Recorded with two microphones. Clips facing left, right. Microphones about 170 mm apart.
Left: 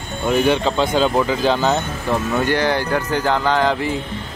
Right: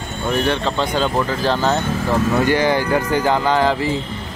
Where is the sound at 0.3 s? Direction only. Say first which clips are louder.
Left 3 dB; 5° left (ahead or behind).